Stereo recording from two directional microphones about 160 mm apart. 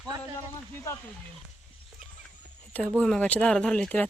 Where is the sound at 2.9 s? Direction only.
5° left (ahead or behind).